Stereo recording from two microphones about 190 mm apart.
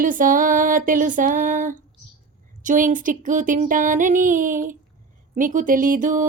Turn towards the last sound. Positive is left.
turn(degrees=-45)  # may be behind; listen again after turning